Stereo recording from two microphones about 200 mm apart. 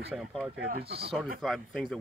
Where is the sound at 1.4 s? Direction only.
Centre (ahead or behind).